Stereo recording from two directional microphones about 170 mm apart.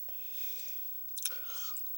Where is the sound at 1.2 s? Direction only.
20° right (ahead or behind).